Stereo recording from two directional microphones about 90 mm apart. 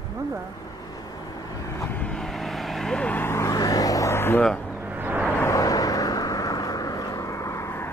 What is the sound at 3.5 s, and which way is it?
Vehicle, 40° left (ahead or behind).